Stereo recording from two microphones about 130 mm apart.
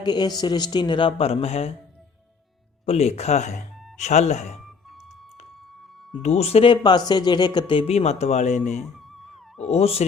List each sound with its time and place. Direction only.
0.0 s speech: 35° left (ahead or behind); by 1.7 s 50° left (ahead or behind)
2.8 s speech: 55° left (ahead or behind)
6.2 s speech: 55° left (ahead or behind)
9.1 s wail: centre (ahead or behind)
9.6 s speech: 50° left (ahead or behind)